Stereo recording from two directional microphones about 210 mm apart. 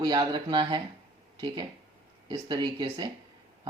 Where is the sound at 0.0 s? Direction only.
20° right (ahead or behind).